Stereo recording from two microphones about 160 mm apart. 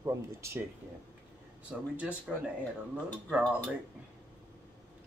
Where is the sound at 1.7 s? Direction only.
10° right (ahead or behind).